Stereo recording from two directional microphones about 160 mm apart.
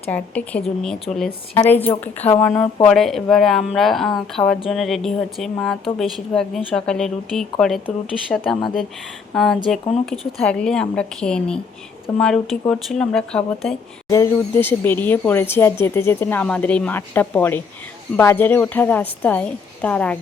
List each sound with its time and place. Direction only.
0.1 s speech: 10° left (ahead or behind)
14.1 s speech: 15° left (ahead or behind)